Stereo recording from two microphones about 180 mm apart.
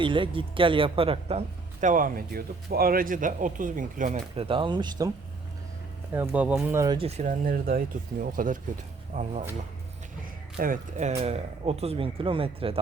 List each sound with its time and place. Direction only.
0.0 s speech: 30° right (ahead or behind); by 4.2 s 45° right (ahead or behind)
4.4 s speech: 30° right (ahead or behind)
6.1 s speech: 10° right (ahead or behind)
6.9 s speech: 35° right (ahead or behind)
10.6 s speech: 45° right (ahead or behind)